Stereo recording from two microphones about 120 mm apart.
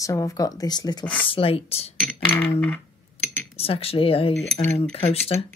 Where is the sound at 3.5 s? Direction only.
55° left (ahead or behind).